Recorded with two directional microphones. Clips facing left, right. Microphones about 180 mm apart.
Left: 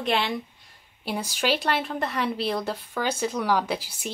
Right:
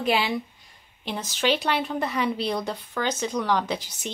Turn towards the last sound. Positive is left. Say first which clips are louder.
# left 1 dB
turn(degrees=10)  # may be behind; listen again after turning